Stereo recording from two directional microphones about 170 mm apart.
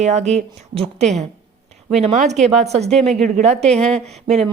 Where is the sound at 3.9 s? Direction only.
40° right (ahead or behind).